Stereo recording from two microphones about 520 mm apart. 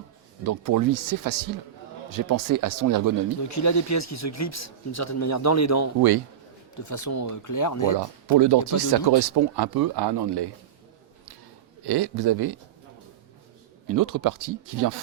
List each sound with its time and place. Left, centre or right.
0.4 s speech: right
3.5 s speech: left
7.9 s speech: right
11.9 s speech: right
13.8 s speech: right